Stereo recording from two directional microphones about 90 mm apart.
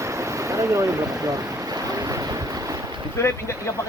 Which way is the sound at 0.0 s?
35° right (ahead or behind).